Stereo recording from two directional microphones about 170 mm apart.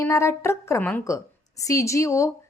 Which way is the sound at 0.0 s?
15° left (ahead or behind).